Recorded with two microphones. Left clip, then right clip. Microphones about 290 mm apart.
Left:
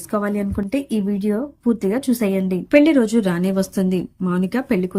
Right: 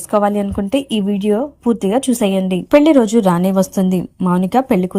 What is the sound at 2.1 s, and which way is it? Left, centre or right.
A woman's voice, centre.